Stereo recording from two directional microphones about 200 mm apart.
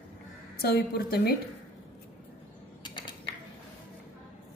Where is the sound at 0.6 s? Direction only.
50° left (ahead or behind).